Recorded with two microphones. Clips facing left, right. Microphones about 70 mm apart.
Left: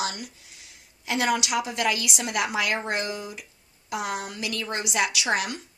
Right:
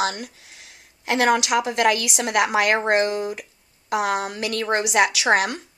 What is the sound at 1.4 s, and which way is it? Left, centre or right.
A woman's voice, right.